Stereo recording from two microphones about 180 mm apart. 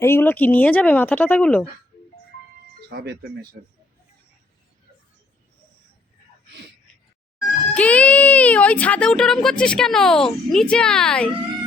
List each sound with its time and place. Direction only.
0.0 s speech: 10° left (ahead or behind)
2.9 s speech: 60° right (ahead or behind)
7.7 s speech: 5° left (ahead or behind)